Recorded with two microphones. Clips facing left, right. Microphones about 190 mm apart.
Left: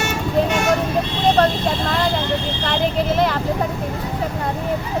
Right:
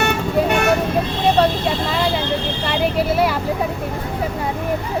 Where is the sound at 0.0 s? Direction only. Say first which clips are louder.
Right 1 dB; 60° right (ahead or behind).